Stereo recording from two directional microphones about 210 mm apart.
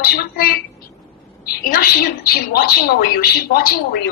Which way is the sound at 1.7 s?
45° left (ahead or behind).